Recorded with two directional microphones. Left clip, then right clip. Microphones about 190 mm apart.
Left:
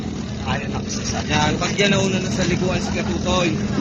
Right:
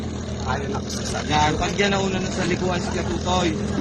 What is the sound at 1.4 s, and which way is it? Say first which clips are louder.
Speech: left 2 dB; 20° right (ahead or behind).